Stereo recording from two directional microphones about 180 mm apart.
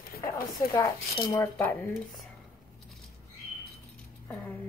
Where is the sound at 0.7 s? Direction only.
20° left (ahead or behind).